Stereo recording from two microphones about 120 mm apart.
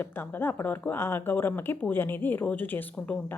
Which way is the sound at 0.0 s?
15° left (ahead or behind).